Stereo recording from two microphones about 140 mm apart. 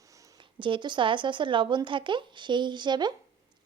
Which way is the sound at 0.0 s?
25° right (ahead or behind).